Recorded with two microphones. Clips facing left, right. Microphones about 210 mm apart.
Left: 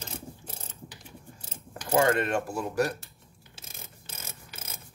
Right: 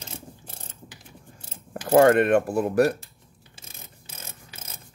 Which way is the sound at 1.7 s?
55° right (ahead or behind).